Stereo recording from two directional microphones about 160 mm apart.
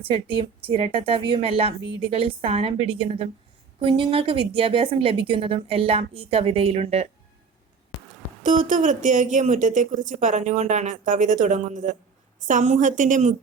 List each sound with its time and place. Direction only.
0.0 s a woman's voice: 35° right (ahead or behind)
8.4 s speech: 50° right (ahead or behind)